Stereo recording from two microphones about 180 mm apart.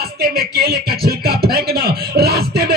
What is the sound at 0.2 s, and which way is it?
Speech, 60° right (ahead or behind).